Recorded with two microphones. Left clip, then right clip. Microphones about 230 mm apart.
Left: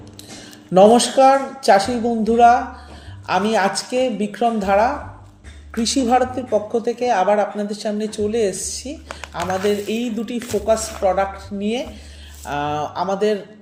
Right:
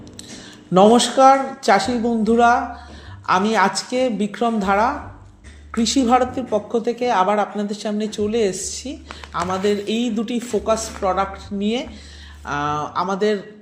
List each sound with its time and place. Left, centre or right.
0.7 s a woman's voice: centre